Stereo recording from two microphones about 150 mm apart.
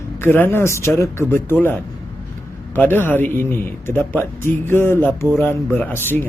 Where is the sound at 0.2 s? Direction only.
15° left (ahead or behind).